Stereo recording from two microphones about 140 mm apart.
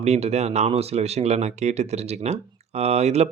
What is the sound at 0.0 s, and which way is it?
Speech, 50° right (ahead or behind).